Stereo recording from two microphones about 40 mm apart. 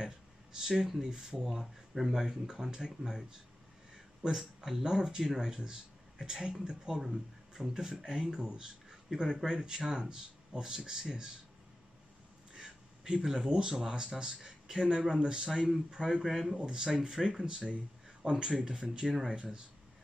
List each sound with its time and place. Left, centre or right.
0.0 s speech: centre
12.5 s a sound: centre
13.6 s speech: centre
16.5 s speech: centre